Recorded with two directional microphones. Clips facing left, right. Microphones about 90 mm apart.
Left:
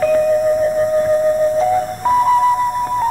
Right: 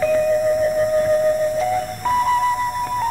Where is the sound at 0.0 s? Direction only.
55° left (ahead or behind).